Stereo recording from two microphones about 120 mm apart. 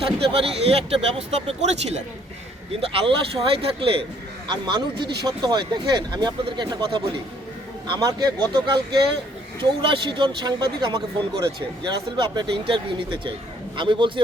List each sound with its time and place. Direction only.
0.0 s a man's voice: 55° right (ahead or behind)
2.8 s speech: 50° right (ahead or behind)
7.9 s speech: 35° right (ahead or behind)
12.1 s speech: 40° right (ahead or behind)